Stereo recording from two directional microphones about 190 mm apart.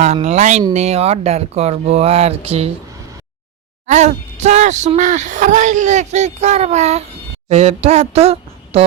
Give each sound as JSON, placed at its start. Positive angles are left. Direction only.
{"t": 0.0, "sound": "speech", "side_deg": -35}
{"t": 3.8, "sound": "speech", "side_deg": -40}